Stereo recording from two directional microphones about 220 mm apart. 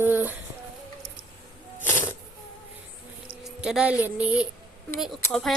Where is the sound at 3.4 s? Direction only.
5° right (ahead or behind).